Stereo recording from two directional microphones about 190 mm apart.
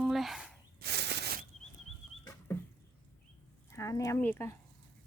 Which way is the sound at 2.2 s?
15° left (ahead or behind).